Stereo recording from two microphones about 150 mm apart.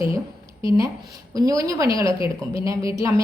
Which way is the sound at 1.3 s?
25° right (ahead or behind).